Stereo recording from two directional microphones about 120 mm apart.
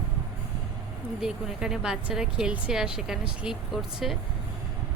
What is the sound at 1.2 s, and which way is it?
Speech, 5° right (ahead or behind).